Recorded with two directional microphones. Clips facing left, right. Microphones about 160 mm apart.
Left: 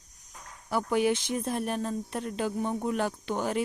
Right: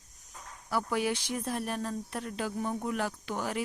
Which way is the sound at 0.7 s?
20° left (ahead or behind).